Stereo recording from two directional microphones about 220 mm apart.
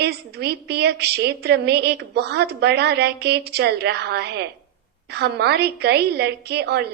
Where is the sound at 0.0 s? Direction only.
50° right (ahead or behind).